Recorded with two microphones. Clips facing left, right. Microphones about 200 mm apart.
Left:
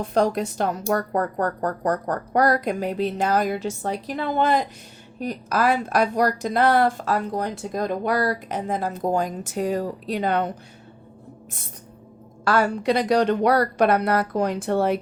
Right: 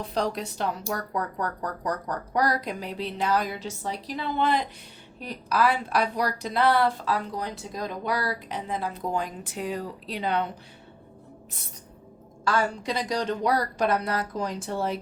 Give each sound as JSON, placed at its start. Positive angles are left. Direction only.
{"t": 0.0, "sound": "a woman's voice", "side_deg": 50}
{"t": 12.5, "sound": "speech", "side_deg": 65}